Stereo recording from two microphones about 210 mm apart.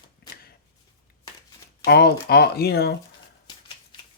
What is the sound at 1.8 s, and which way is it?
Speech, 50° left (ahead or behind).